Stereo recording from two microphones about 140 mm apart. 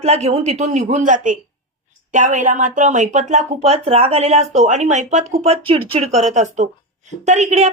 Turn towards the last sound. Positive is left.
turn(degrees=-55)  # may be behind; listen again after turning